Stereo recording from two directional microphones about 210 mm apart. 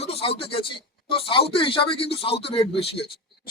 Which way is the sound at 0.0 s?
30° left (ahead or behind).